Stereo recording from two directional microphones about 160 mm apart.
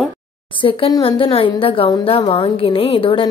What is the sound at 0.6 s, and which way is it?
A woman's voice, 35° left (ahead or behind).